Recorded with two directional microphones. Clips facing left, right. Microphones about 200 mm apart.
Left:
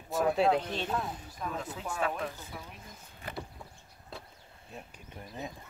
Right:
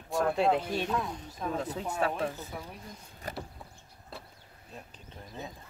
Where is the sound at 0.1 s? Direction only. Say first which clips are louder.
Even; centre (ahead or behind).